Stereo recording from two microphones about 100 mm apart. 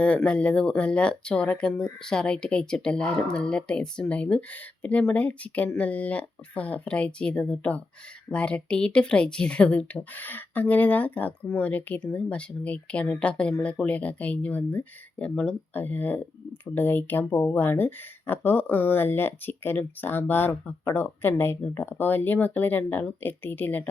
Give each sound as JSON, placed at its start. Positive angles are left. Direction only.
{"t": 0.0, "sound": "speech", "side_deg": 10}